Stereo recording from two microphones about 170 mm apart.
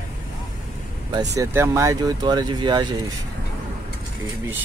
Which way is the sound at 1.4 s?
15° right (ahead or behind).